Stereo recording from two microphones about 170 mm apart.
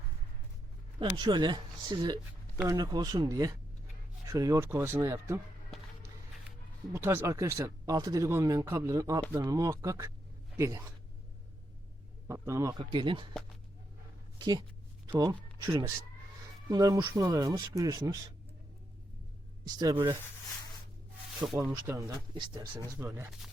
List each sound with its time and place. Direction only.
0.9 s speech: 25° right (ahead or behind)
6.9 s speech: 15° right (ahead or behind)
12.3 s speech: 15° right (ahead or behind)
12.8 s speech: 30° right (ahead or behind)
14.3 s speech: 25° right (ahead or behind)
15.6 s speech: 20° right (ahead or behind)
19.6 s speech: 25° right (ahead or behind)
21.6 s speech: 20° right (ahead or behind)
23.0 s speech: 10° right (ahead or behind)